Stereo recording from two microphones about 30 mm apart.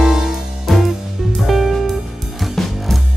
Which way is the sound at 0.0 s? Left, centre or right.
Centre.